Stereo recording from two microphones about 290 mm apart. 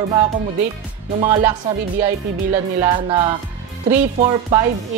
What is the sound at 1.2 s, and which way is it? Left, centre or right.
Speech, centre.